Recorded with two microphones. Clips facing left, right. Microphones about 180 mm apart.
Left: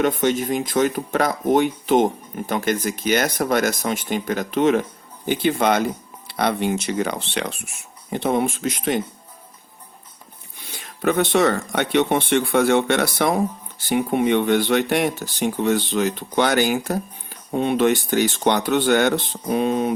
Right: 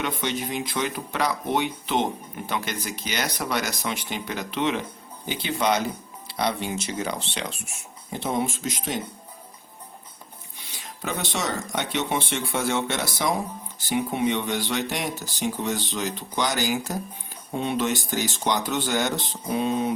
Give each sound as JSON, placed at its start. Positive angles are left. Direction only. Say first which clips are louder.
{"t": 0.0, "sound": "speech", "louder": "left 9 dB", "side_deg": 45}
{"t": 10.6, "sound": "speech", "louder": "left 10 dB", "side_deg": 60}